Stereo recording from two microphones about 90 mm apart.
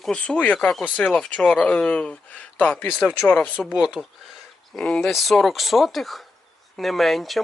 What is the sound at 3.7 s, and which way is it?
Speech, 10° right (ahead or behind).